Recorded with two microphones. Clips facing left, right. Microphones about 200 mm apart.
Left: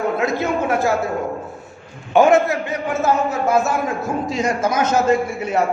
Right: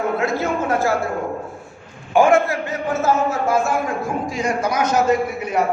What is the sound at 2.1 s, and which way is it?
Speech, 20° left (ahead or behind).